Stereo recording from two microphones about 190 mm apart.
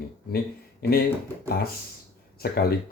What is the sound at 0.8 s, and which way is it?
Speech, 55° left (ahead or behind).